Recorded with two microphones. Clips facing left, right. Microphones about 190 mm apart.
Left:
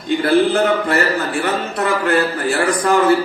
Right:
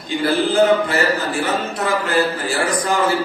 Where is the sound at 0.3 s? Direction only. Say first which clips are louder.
Even; 60° left (ahead or behind).